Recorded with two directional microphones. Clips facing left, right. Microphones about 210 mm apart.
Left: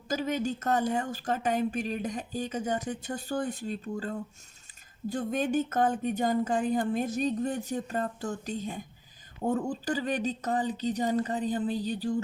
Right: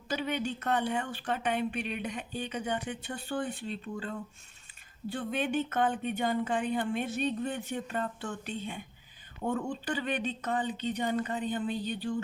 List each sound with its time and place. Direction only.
0.1 s a woman's voice: 40° left (ahead or behind)